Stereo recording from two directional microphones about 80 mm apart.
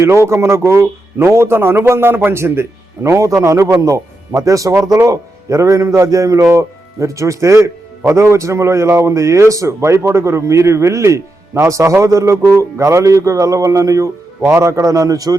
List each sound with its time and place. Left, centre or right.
0.3 s a man's voice: right